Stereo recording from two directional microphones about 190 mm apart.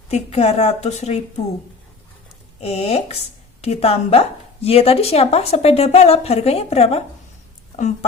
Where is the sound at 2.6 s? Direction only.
30° left (ahead or behind).